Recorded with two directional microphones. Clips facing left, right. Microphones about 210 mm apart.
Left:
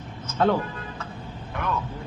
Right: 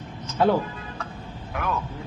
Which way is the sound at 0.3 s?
10° right (ahead or behind).